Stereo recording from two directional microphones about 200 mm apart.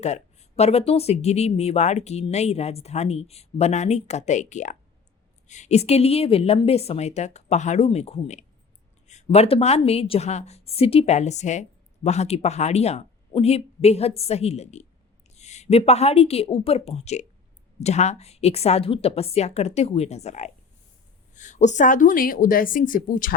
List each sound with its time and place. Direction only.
0.0 s a woman's voice: 35° left (ahead or behind)